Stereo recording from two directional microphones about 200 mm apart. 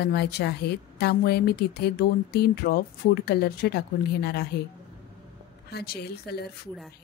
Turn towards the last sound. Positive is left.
turn(degrees=50)  # may be behind; listen again after turning